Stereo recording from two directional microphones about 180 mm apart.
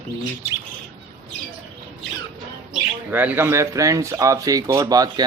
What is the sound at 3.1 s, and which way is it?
Speech, 10° right (ahead or behind).